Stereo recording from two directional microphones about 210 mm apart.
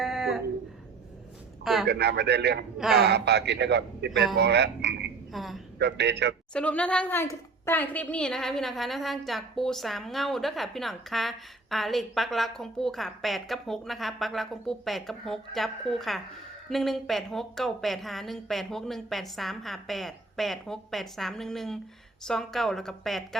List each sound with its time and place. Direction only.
0.0 s a sound: centre (ahead or behind)
1.6 s a man's voice: centre (ahead or behind)
1.9 s a man's voice: 50° right (ahead or behind)
5.3 s a woman's voice: centre (ahead or behind)
5.8 s a man's voice: 55° right (ahead or behind)
6.5 s a woman's voice: 5° left (ahead or behind)